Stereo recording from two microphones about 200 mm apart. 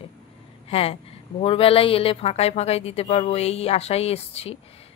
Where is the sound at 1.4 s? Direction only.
30° left (ahead or behind).